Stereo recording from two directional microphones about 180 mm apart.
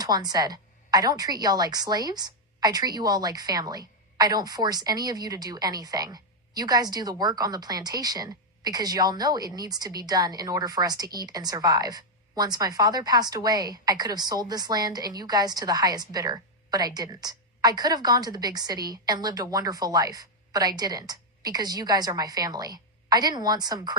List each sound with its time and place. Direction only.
0.0 s a woman's voice: 20° right (ahead or behind)